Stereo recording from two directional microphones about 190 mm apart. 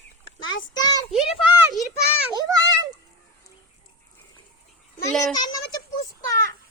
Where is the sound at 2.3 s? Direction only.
20° right (ahead or behind).